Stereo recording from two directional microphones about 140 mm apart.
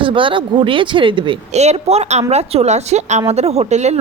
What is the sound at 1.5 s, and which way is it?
A woman's voice, 50° right (ahead or behind).